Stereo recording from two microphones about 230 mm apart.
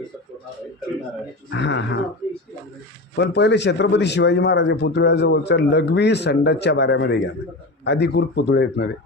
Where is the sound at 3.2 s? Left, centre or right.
Left.